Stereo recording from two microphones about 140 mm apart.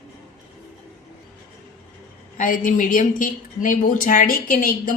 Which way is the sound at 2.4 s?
70° left (ahead or behind).